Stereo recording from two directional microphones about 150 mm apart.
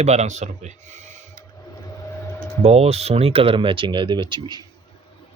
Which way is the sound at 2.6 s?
45° right (ahead or behind).